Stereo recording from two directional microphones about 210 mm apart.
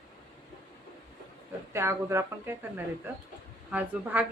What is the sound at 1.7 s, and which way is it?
Speech, 10° right (ahead or behind).